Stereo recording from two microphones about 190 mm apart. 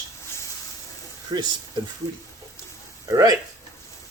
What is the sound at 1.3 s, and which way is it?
Speech, 25° right (ahead or behind).